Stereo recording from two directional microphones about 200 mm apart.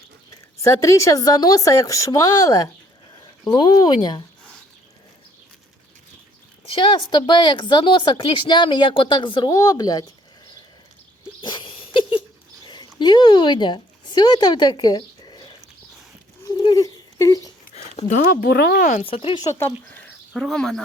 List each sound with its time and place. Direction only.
0.5 s speech: 15° left (ahead or behind)
6.7 s speech: 25° left (ahead or behind)
11.4 s a sound: 25° left (ahead or behind)
12.6 s speech: 20° left (ahead or behind)
16.5 s a sound: 20° left (ahead or behind)
17.7 s speech: 35° left (ahead or behind)
19.0 s speech: 30° left (ahead or behind)
19.5 s speech: 10° left (ahead or behind)